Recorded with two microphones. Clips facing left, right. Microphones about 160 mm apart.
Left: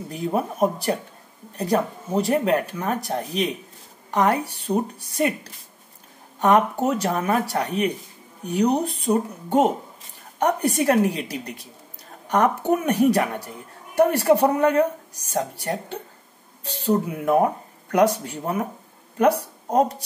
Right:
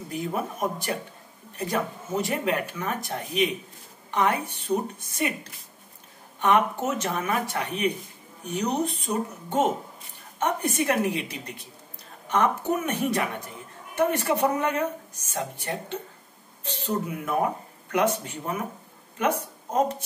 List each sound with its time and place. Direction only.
0.1 s a woman's voice: 35° left (ahead or behind)